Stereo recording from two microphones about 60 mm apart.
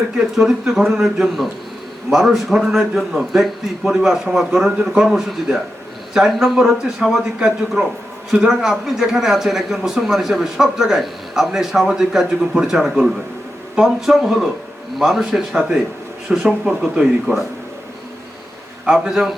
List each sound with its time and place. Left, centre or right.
0.3 s speech: centre
7.8 s a man's voice: right
8.3 s speech: centre
17.3 s a man's voice: right
18.9 s a man's voice: centre